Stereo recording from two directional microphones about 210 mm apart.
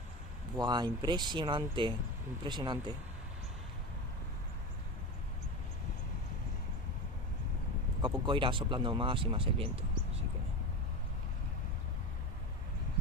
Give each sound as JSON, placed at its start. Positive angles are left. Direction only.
{"t": 0.6, "sound": "speech", "side_deg": -20}
{"t": 8.0, "sound": "speech", "side_deg": -25}